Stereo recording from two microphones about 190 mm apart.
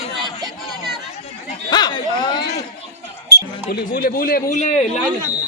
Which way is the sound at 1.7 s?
20° left (ahead or behind).